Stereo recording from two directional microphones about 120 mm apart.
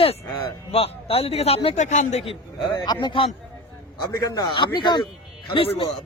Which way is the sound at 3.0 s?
45° left (ahead or behind).